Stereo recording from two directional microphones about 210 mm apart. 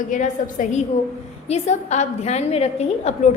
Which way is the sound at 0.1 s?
35° left (ahead or behind).